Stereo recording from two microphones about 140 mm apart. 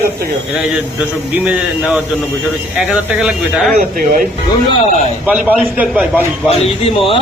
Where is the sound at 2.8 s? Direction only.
5° right (ahead or behind).